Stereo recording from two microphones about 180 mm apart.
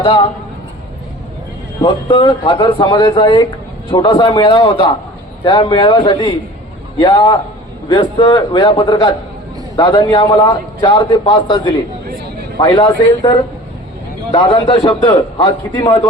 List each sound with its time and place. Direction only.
0.0 s a man's voice: 30° left (ahead or behind)
1.8 s a man's voice: 25° left (ahead or behind)